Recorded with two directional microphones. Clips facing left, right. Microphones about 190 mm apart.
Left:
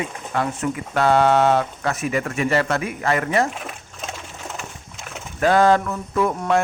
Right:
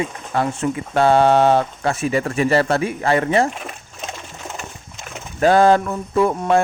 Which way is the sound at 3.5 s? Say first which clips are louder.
Right 1 dB; centre (ahead or behind).